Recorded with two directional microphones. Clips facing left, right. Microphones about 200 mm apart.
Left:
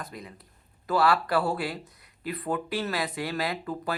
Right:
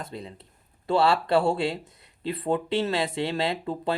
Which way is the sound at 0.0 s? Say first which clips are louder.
Right 4 dB; 25° right (ahead or behind).